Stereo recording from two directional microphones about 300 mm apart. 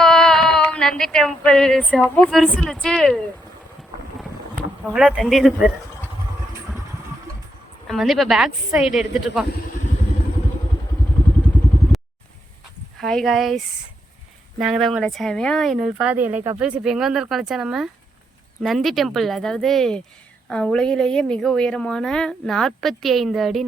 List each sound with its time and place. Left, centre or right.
0.0 s a sound: centre
4.9 s speech: centre
7.9 s speech: centre
13.0 s speech: centre
14.6 s speech: centre
16.3 s speech: centre
16.8 s speech: centre